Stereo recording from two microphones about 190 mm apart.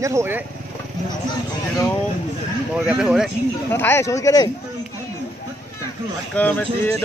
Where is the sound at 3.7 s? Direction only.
10° left (ahead or behind).